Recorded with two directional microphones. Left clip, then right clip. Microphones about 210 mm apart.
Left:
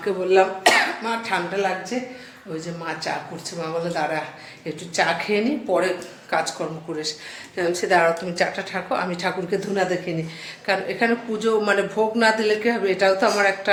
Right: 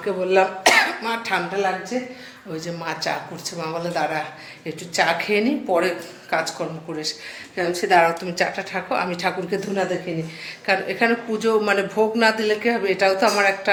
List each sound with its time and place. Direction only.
0.0 s speech: 10° right (ahead or behind)
7.5 s speech: 5° right (ahead or behind)